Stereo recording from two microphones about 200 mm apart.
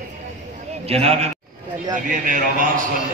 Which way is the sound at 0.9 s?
30° right (ahead or behind).